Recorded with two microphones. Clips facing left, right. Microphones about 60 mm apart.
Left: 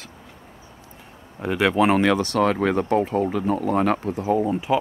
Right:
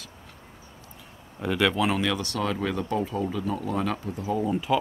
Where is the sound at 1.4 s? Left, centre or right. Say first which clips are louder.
Left 3 dB; centre.